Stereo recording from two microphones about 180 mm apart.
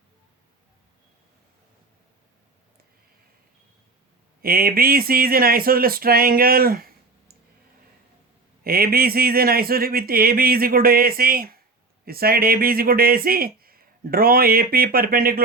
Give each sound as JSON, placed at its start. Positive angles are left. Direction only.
{"t": 4.4, "sound": "speech", "side_deg": -55}
{"t": 8.6, "sound": "speech", "side_deg": -55}